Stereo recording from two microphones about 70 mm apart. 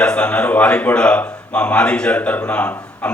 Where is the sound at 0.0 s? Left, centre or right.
Centre.